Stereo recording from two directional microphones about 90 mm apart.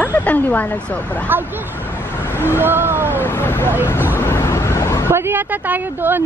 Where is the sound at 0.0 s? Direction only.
20° left (ahead or behind).